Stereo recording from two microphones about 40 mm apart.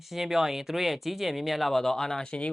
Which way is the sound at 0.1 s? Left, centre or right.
Centre.